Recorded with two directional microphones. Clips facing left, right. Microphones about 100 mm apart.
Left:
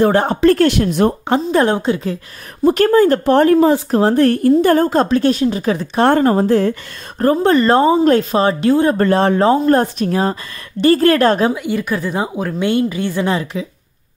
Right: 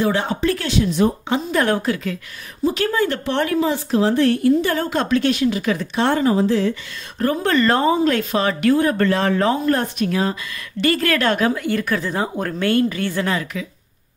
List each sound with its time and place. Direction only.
0.0 s a woman's voice: 45° left (ahead or behind)
0.5 s a woman's voice: 55° left (ahead or behind)
1.5 s a woman's voice: 30° left (ahead or behind)
2.6 s a woman's voice: 50° left (ahead or behind); by 6.0 s 35° left (ahead or behind)
6.0 s a woman's voice: 50° left (ahead or behind)
7.2 s speech: 35° left (ahead or behind)
11.5 s a woman's voice: 15° left (ahead or behind)